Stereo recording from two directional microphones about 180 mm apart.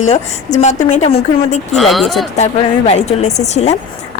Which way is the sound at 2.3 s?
40° left (ahead or behind).